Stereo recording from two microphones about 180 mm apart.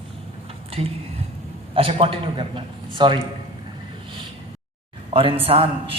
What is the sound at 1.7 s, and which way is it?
A man's voice, 30° right (ahead or behind).